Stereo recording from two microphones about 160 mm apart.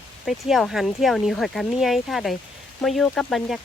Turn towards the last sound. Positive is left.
turn(degrees=0)  # may be behind; listen again after turning